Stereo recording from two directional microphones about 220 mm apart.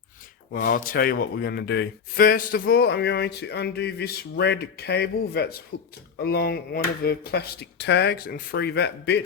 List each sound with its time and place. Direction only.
0.5 s speech: 40° left (ahead or behind)